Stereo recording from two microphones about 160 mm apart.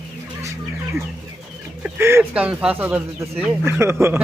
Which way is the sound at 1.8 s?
15° right (ahead or behind).